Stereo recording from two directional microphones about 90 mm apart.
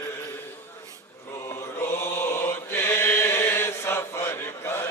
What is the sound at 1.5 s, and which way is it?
Chant, 30° left (ahead or behind).